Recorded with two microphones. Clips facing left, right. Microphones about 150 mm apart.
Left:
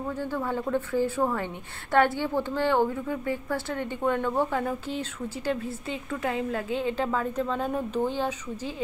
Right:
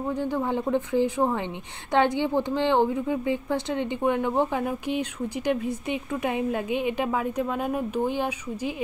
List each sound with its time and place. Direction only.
0.2 s a woman's voice: 20° right (ahead or behind)